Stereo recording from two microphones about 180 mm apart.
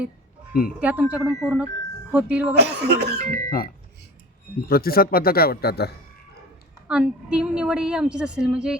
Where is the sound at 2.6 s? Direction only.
70° right (ahead or behind).